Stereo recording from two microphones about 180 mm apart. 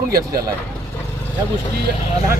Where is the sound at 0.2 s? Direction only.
20° right (ahead or behind).